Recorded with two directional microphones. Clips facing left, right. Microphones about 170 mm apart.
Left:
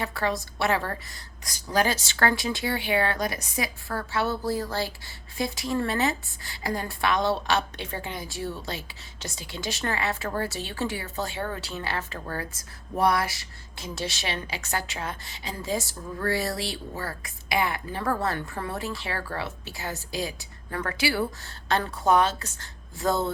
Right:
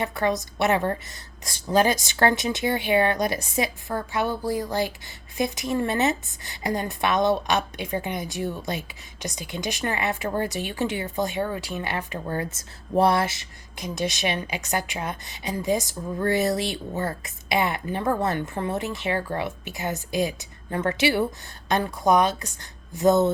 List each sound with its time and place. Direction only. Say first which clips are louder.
0.0 s a woman's voice: right 4 dB; 20° right (ahead or behind)